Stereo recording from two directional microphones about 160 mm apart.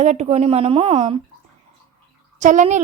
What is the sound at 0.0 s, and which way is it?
Speech, 45° right (ahead or behind).